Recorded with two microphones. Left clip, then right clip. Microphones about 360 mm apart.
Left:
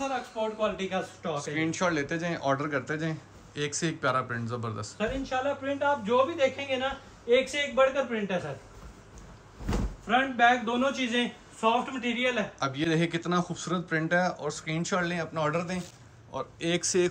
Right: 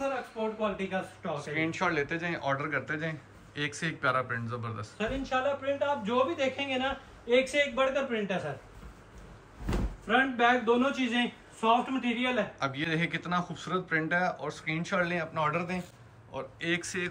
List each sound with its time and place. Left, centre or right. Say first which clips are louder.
0.4 s speech: left 4 dB; centre
9.7 s speech: left 1 dB; centre